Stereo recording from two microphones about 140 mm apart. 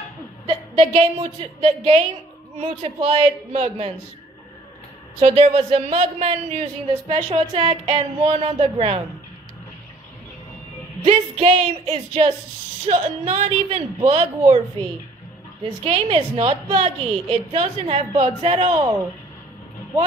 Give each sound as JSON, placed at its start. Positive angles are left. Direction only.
{"t": 0.7, "sound": "a woman's voice", "side_deg": -40}
{"t": 5.2, "sound": "speech", "side_deg": -45}
{"t": 11.1, "sound": "a woman's voice", "side_deg": -40}
{"t": 12.8, "sound": "speech", "side_deg": -50}
{"t": 15.8, "sound": "speech", "side_deg": -45}